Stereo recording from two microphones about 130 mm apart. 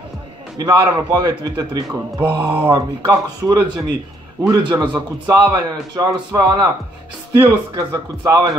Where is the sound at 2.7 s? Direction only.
30° right (ahead or behind).